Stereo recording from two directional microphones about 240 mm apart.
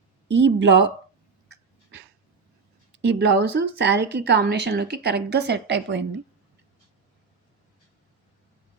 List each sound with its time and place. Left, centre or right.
0.4 s speech: right
2.9 s speech: right